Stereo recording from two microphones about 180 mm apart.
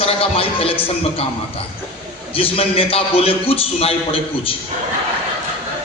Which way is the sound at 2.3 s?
30° left (ahead or behind).